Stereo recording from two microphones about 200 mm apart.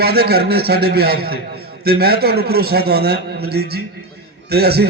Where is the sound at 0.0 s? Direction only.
50° right (ahead or behind).